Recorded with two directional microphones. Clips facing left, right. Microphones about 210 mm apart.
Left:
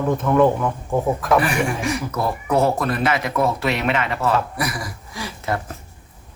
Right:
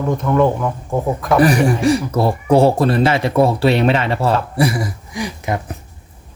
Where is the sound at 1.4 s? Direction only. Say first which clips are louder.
Right 7 dB; 40° right (ahead or behind); by 5.7 s 15° right (ahead or behind).